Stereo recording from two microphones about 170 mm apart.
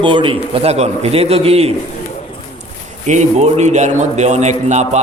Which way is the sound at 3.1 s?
40° right (ahead or behind).